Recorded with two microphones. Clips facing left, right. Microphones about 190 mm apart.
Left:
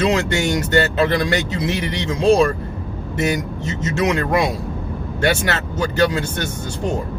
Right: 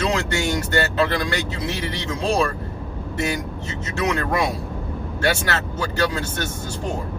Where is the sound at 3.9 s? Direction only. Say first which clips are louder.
Left 3 dB; 20° left (ahead or behind).